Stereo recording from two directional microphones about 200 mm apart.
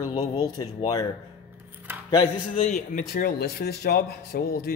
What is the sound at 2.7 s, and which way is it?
A man's voice, 40° left (ahead or behind).